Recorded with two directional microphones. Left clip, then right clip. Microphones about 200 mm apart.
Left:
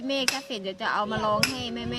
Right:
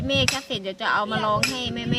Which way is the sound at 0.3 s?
15° right (ahead or behind).